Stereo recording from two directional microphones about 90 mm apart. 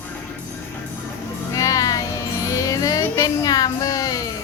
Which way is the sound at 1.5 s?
40° left (ahead or behind).